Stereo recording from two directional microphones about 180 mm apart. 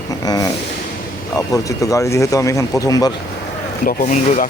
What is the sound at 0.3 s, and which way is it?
Speech, 20° left (ahead or behind).